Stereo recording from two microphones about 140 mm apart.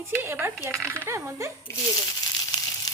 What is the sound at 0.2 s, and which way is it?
Speech, 15° right (ahead or behind).